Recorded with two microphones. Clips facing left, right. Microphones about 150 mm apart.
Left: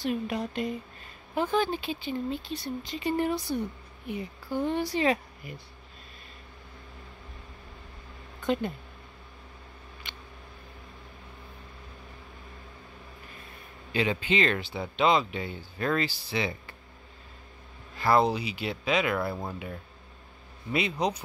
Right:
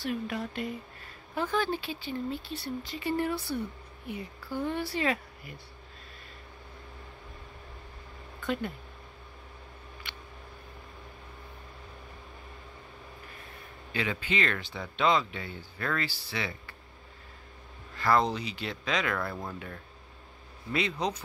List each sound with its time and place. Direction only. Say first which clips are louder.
0.0 s speech: left 3 dB; 20° left (ahead or behind)
8.4 s speech: left 4 dB; 20° left (ahead or behind)
13.9 s speech: left 5 dB; 25° left (ahead or behind)
17.9 s speech: left 3 dB; 15° left (ahead or behind)
20.7 s speech: left 2 dB; 10° left (ahead or behind)